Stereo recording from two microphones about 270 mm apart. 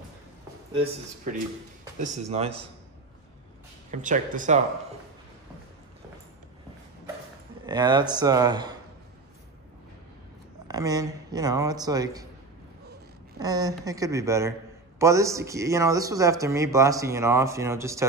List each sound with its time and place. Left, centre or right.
2.0 s speech: right
3.9 s speech: right
7.6 s speech: centre
10.7 s speech: centre
13.4 s speech: centre